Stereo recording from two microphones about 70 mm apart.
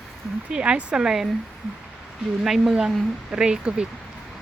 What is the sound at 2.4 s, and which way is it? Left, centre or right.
Speech, centre.